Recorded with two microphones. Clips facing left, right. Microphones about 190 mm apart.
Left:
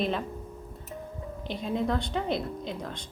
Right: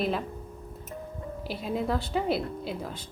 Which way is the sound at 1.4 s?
5° right (ahead or behind).